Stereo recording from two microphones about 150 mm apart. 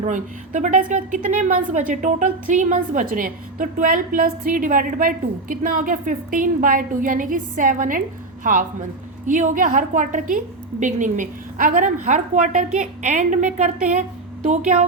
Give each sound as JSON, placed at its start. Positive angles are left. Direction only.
{"t": 0.0, "sound": "a woman's voice", "side_deg": -55}
{"t": 9.2, "sound": "a woman's voice", "side_deg": -60}